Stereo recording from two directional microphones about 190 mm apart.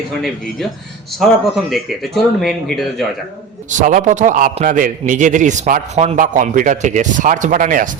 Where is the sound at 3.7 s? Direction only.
40° right (ahead or behind).